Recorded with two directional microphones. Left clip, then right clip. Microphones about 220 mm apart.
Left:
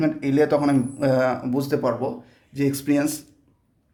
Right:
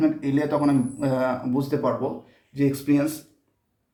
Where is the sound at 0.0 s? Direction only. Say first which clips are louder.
Left 3 dB; 45° left (ahead or behind).